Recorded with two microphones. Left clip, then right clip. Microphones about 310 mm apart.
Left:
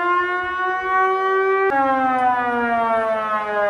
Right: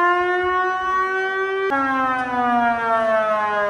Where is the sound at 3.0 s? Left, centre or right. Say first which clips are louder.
Right 3 dB; centre.